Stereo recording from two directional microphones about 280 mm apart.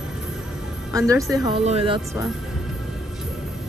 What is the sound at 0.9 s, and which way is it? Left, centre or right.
Speech, centre.